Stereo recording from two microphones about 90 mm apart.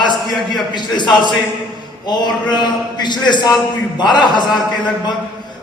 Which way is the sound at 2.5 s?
55° left (ahead or behind).